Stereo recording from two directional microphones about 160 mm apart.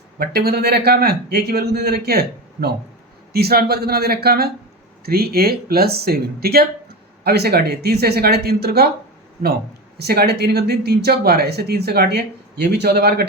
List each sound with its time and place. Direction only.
0.2 s speech: 75° right (ahead or behind)
10.0 s speech: 90° right